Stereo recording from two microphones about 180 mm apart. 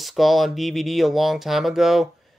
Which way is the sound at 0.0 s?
Centre (ahead or behind).